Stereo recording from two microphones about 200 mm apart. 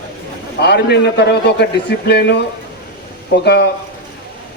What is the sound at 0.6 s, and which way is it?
A man's voice, 55° left (ahead or behind).